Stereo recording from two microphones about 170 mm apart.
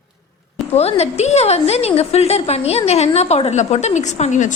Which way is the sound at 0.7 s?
40° left (ahead or behind).